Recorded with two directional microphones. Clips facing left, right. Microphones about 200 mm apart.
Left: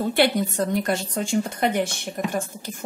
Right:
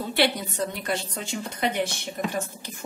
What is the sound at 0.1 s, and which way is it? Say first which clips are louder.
A woman's voice: left 2 dB; 50° left (ahead or behind).